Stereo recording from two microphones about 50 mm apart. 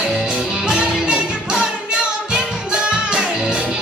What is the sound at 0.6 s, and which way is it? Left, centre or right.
Music, centre.